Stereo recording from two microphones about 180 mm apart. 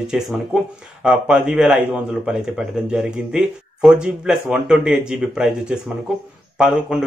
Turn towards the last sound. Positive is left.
turn(degrees=-5)  # may be behind; listen again after turning